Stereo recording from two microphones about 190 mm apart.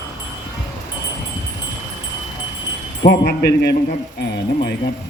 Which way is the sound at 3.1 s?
55° left (ahead or behind).